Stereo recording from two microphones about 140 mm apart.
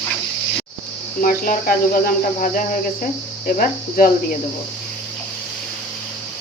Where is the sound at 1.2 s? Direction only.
90° left.